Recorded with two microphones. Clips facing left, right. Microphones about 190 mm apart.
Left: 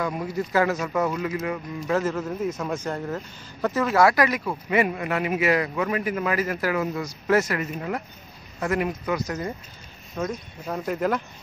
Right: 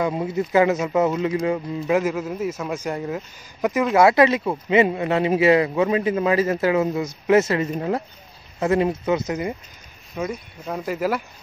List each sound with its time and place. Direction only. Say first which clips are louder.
0.0 s speech: right 4 dB; 25° right (ahead or behind)
1.9 s speech: right 3 dB; 10° right (ahead or behind)
3.9 s speech: right 5 dB; 25° right (ahead or behind); by 11.2 s 5° right (ahead or behind)